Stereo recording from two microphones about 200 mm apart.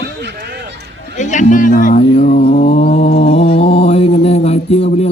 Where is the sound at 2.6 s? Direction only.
30° left (ahead or behind).